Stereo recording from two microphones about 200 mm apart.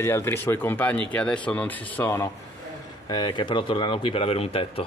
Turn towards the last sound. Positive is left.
turn(degrees=30)  # may be behind; listen again after turning